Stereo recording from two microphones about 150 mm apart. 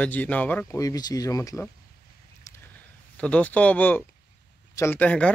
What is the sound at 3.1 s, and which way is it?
Speech, 10° left (ahead or behind).